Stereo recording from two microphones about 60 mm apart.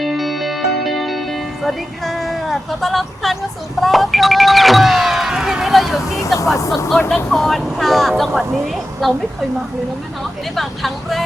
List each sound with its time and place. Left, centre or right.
0.0 s music: centre
3.8 s power windows: centre
6.1 s vehicle: left
6.6 s speech: left
7.3 s speech: centre
10.5 s speech: centre